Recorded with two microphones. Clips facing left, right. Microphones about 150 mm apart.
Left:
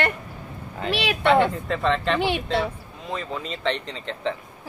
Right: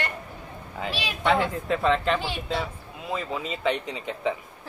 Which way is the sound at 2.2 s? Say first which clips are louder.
Left 6 dB; 65° left (ahead or behind).